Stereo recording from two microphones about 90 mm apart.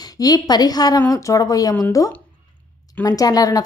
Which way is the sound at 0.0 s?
45° left (ahead or behind).